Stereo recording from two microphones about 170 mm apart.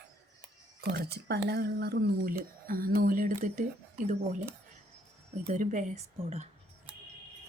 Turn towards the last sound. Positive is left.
turn(degrees=-40)  # may be behind; listen again after turning